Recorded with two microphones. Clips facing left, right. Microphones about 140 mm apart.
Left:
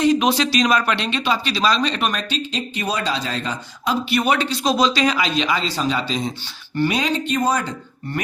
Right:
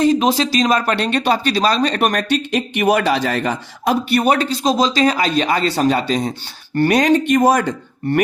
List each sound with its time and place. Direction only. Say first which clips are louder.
0.0 s speech: right 2 dB; 35° right (ahead or behind); by 4.3 s 50° right (ahead or behind)
4.3 s speech: right 3 dB; 40° right (ahead or behind); by 8.2 s 70° right (ahead or behind)